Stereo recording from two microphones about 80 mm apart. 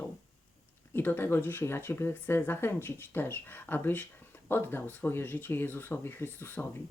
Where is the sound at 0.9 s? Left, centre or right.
Left.